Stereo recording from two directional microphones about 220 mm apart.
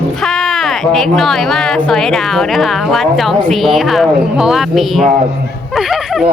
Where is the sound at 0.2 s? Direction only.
Centre (ahead or behind).